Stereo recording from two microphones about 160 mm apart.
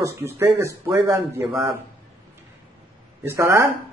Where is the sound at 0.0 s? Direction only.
15° right (ahead or behind).